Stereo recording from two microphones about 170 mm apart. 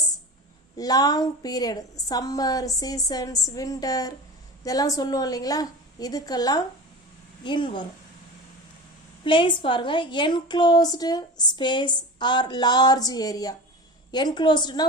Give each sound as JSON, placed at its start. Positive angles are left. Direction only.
{"t": 0.8, "sound": "a woman's voice", "side_deg": 20}
{"t": 9.2, "sound": "a woman's voice", "side_deg": 30}